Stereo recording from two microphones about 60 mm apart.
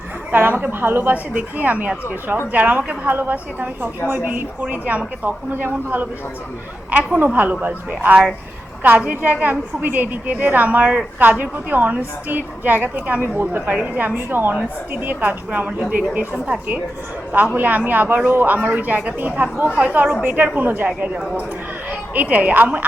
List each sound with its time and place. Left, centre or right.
0.3 s a woman's voice: right
7.6 s a woman's voice: right
22.1 s a woman's voice: right